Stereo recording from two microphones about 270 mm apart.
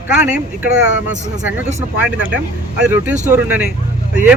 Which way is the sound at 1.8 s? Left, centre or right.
Centre.